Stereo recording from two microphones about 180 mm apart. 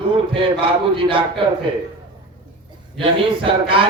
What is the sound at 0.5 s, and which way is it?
Speech, 30° right (ahead or behind).